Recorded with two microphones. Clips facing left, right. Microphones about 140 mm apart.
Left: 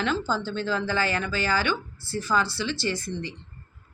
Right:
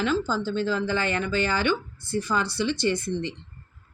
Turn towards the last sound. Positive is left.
turn(degrees=-25)  # may be behind; listen again after turning